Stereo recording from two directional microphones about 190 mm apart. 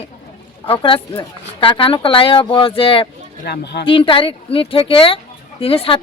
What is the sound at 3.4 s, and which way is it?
Speech, 60° left (ahead or behind).